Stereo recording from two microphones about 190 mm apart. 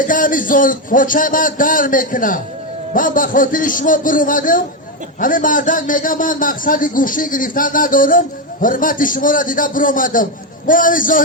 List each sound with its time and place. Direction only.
0.1 s a man's voice: 45° left (ahead or behind)